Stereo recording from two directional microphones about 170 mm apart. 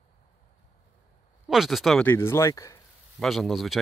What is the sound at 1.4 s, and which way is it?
Speech, centre (ahead or behind).